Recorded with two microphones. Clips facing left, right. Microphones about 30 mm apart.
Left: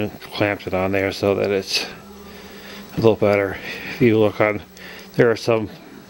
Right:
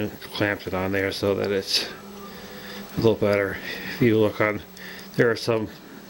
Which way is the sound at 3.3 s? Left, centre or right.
Left.